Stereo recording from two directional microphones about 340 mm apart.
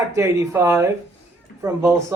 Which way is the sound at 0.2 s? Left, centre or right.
Centre.